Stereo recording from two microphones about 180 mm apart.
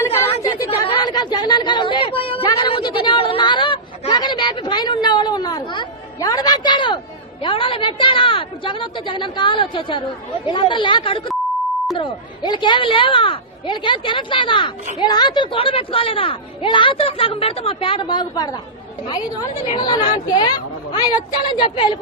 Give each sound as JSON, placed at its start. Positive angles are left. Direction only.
{"t": 0.0, "sound": "chatter", "side_deg": 15}
{"t": 0.3, "sound": "chatter", "side_deg": 35}
{"t": 0.8, "sound": "a sound", "side_deg": 25}
{"t": 7.4, "sound": "a woman's voice", "side_deg": 30}
{"t": 19.7, "sound": "a woman's voice", "side_deg": 20}
{"t": 21.5, "sound": "a woman's voice", "side_deg": 25}